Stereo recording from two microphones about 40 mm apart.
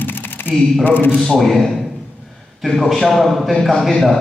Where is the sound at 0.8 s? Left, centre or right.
Left.